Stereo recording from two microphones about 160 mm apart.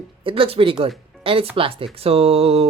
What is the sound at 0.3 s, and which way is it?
Speech, 35° right (ahead or behind).